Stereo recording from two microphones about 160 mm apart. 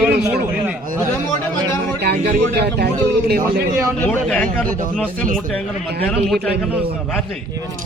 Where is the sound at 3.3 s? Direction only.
75° right (ahead or behind).